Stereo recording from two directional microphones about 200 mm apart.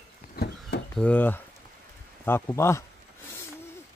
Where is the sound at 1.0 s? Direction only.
10° left (ahead or behind).